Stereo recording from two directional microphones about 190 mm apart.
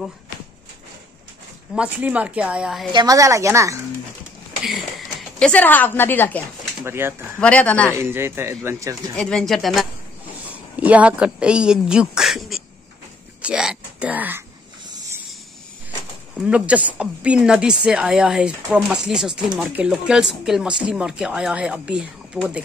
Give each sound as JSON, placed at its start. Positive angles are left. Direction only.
{"t": 1.8, "sound": "speech", "side_deg": -5}
{"t": 2.9, "sound": "speech", "side_deg": -20}
{"t": 5.4, "sound": "a woman's voice", "side_deg": 10}
{"t": 6.8, "sound": "speech", "side_deg": -10}
{"t": 7.3, "sound": "a woman's voice", "side_deg": 5}
{"t": 7.9, "sound": "speech", "side_deg": -15}
{"t": 9.1, "sound": "speech", "side_deg": 5}
{"t": 16.3, "sound": "speech", "side_deg": -5}